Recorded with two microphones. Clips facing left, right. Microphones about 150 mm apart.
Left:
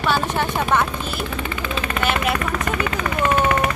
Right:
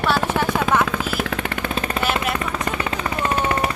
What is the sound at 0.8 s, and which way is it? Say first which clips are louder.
Jackhammer: right 2 dB; 90° right.